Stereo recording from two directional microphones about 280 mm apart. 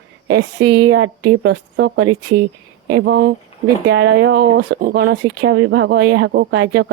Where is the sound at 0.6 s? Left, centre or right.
Right.